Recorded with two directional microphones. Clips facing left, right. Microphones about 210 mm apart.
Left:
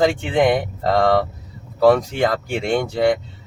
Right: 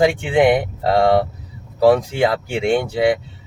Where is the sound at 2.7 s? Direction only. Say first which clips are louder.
Right 1 dB; 5° right (ahead or behind).